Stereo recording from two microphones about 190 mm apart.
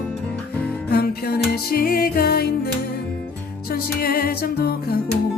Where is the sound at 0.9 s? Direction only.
55° left (ahead or behind).